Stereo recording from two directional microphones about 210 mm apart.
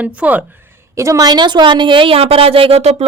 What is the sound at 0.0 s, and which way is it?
A woman's voice, 5° right (ahead or behind).